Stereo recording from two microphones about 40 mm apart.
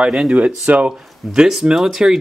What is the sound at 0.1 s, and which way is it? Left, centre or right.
Speech, centre.